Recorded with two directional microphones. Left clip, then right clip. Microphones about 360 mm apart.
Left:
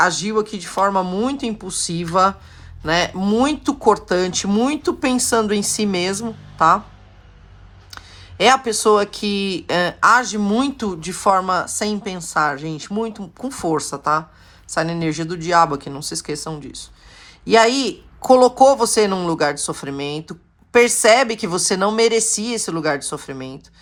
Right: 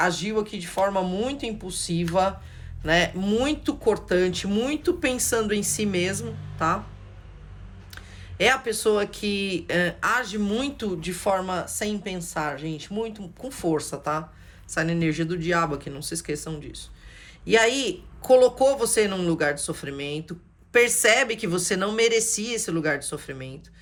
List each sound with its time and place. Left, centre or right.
0.0 s speech: centre
7.9 s speech: centre